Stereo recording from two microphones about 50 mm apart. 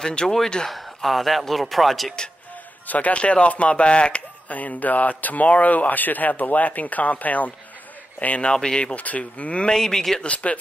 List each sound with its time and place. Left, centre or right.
0.0 s speech: centre
0.7 s speech: centre
2.9 s speech: left
8.5 s speech: centre
9.8 s speech: centre
10.2 s speech: left